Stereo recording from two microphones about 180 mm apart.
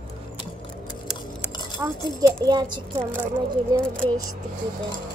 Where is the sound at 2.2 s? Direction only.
20° right (ahead or behind).